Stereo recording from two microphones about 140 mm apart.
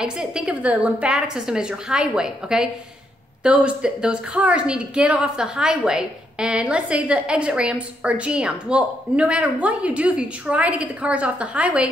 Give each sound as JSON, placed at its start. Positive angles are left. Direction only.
{"t": 0.0, "sound": "a woman's voice", "side_deg": -5}